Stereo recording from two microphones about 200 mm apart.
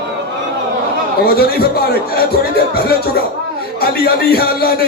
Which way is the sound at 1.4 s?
50° left (ahead or behind).